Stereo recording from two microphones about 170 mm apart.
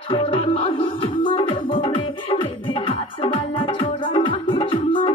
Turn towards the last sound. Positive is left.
turn(degrees=30)  # may be behind; listen again after turning